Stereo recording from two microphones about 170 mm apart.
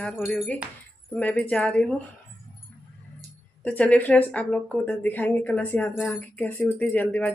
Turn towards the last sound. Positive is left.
turn(degrees=10)  # may be behind; listen again after turning